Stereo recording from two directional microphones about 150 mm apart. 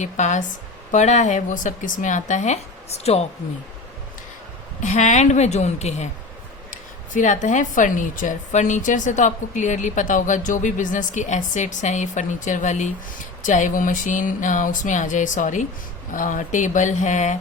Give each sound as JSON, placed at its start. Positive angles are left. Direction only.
{"t": 0.0, "sound": "a woman's voice", "side_deg": 55}
{"t": 4.8, "sound": "a woman's voice", "side_deg": 55}
{"t": 6.7, "sound": "speech", "side_deg": 60}